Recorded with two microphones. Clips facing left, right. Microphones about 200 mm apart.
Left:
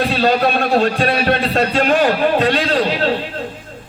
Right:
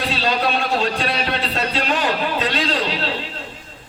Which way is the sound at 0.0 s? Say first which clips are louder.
Left 6 dB; 50° left (ahead or behind).